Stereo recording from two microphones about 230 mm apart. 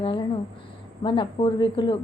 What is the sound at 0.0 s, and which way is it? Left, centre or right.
A woman's voice, left.